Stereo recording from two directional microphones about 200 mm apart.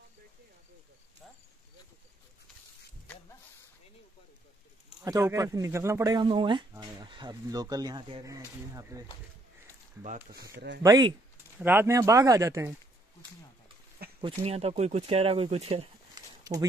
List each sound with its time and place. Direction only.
5.0 s speech: 15° right (ahead or behind)
10.5 s speech: 55° right (ahead or behind)
10.8 s speech: 20° right (ahead or behind)
14.2 s speech: 30° right (ahead or behind)
16.2 s a sound: 20° right (ahead or behind)